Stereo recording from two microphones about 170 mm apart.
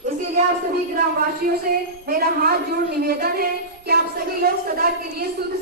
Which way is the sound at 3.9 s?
70° right (ahead or behind).